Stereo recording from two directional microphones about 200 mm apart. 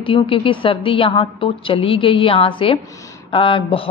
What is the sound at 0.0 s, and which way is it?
A woman's voice, 25° left (ahead or behind).